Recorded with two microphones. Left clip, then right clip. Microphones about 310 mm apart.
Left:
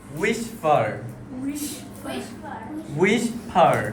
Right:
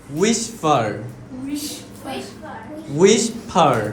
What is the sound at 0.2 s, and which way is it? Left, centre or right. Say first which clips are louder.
Speech: right 4 dB; centre.